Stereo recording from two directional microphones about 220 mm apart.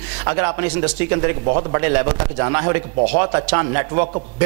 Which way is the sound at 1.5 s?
25° right (ahead or behind).